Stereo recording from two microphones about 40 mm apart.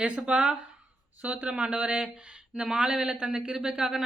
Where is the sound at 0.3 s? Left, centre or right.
Right.